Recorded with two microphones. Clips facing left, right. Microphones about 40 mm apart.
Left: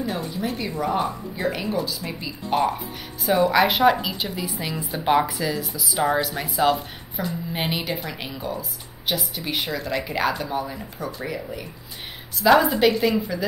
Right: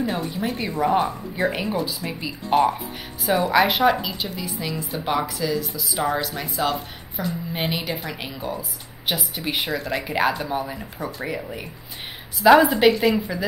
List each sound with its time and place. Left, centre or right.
0.4 s a woman's voice: centre
1.8 s a woman's voice: centre
4.6 s a woman's voice: centre